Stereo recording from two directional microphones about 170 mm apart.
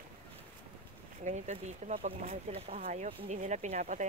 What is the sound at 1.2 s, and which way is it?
Speech, 45° right (ahead or behind).